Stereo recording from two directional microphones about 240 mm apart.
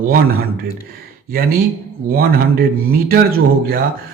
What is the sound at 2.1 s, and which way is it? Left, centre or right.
A man's voice, right.